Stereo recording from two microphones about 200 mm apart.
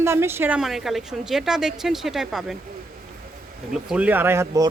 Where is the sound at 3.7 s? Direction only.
5° right (ahead or behind).